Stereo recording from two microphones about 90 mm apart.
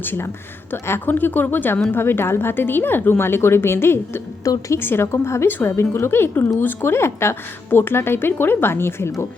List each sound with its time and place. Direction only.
0.0 s speech: 20° left (ahead or behind)